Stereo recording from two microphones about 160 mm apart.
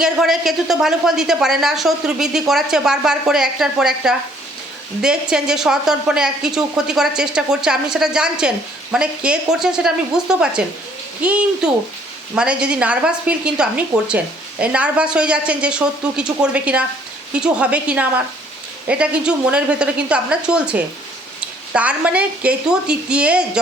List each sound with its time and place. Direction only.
0.0 s a woman's voice: centre (ahead or behind)